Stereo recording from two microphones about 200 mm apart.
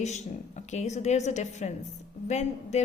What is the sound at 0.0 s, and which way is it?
A woman's voice, 35° left (ahead or behind).